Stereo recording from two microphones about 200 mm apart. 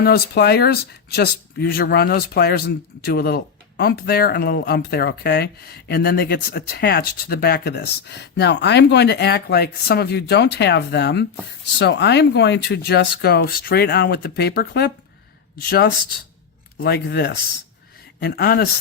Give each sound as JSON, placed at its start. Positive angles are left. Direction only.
{"t": 0.0, "sound": "speech", "side_deg": 55}
{"t": 16.8, "sound": "speech", "side_deg": 55}